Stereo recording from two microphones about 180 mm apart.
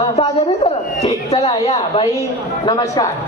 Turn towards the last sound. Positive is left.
turn(degrees=25)  # may be behind; listen again after turning